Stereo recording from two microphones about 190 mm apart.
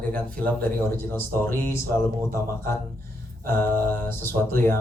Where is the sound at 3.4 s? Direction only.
10° left (ahead or behind).